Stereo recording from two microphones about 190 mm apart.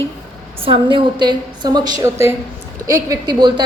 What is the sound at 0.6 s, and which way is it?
A woman's voice, 25° right (ahead or behind).